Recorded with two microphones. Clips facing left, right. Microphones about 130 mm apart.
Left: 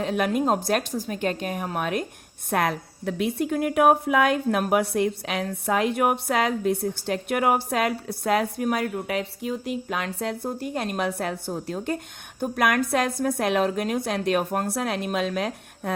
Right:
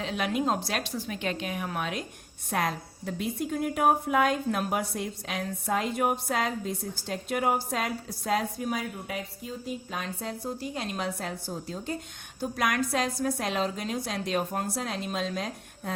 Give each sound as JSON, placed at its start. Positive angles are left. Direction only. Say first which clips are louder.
{"t": 0.0, "sound": "a woman's voice", "louder": "left 5 dB", "side_deg": 50}